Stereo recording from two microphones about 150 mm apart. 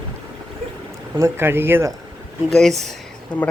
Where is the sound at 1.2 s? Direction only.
15° right (ahead or behind).